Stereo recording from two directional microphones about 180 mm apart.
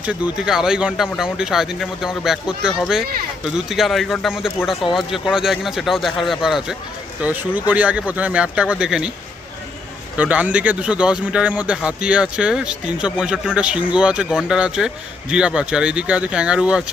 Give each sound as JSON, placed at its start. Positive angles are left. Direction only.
{"t": 0.0, "sound": "speech", "side_deg": -5}
{"t": 10.2, "sound": "speech", "side_deg": -10}